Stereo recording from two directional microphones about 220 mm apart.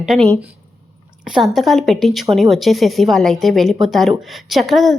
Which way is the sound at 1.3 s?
Centre (ahead or behind).